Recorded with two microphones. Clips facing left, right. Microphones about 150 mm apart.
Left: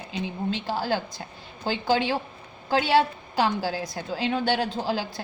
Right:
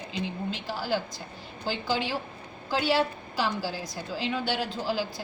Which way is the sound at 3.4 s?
55° left (ahead or behind).